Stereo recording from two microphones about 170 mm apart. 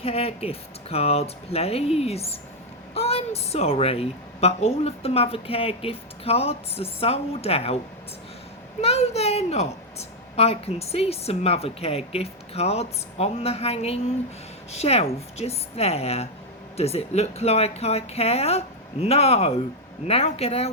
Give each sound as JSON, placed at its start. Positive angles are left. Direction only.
{"t": 0.0, "sound": "a woman's voice", "side_deg": 35}
{"t": 8.8, "sound": "a woman's voice", "side_deg": 40}